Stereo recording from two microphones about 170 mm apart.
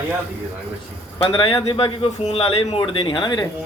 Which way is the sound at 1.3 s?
30° left (ahead or behind).